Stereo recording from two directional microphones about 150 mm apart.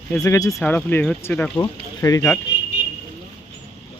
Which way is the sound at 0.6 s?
10° left (ahead or behind).